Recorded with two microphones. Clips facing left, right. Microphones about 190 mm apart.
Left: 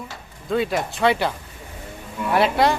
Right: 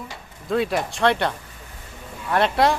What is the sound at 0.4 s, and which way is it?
Speech, centre (ahead or behind).